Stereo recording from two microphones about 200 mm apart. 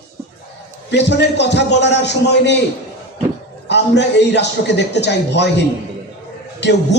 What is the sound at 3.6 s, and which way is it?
A man's voice, 60° left (ahead or behind).